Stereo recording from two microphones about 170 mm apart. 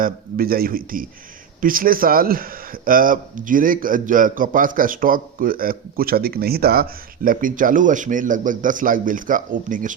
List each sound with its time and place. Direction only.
0.0 s a man's voice: 60° right (ahead or behind)